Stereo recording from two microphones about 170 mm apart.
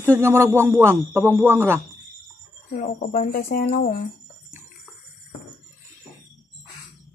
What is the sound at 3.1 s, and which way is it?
Speech, 55° left (ahead or behind).